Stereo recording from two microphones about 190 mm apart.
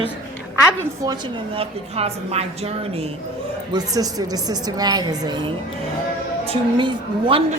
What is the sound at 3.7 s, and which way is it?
A woman's voice, 20° right (ahead or behind).